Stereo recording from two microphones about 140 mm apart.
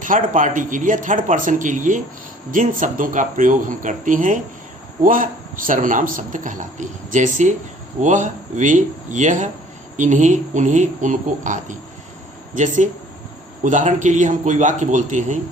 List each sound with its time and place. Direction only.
0.0 s a man's voice: 70° right (ahead or behind)